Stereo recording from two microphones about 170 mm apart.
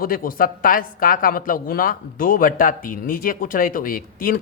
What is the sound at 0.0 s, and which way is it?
A woman's voice, 55° left (ahead or behind).